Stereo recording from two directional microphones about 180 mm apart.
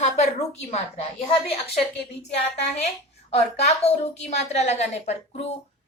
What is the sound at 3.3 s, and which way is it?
A woman's voice, 35° left (ahead or behind).